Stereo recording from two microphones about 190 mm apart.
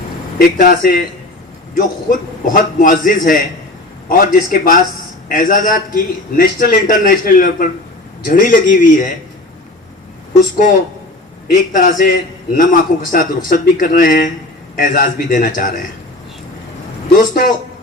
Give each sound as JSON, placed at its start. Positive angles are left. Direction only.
{"t": 0.3, "sound": "a man's voice", "side_deg": 50}
{"t": 11.5, "sound": "a man's voice", "side_deg": 45}
{"t": 17.2, "sound": "a man's voice", "side_deg": 45}